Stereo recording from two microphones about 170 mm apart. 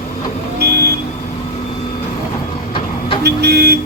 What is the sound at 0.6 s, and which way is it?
Vehicle, 70° right (ahead or behind).